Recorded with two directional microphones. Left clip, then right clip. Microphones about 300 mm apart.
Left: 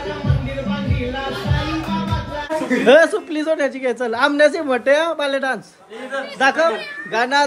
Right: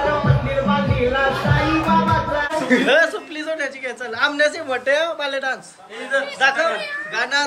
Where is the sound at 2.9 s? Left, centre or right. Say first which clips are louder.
Left 10 dB; centre.